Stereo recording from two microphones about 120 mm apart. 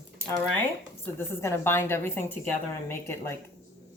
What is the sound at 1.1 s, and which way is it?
A woman's voice, 20° left (ahead or behind).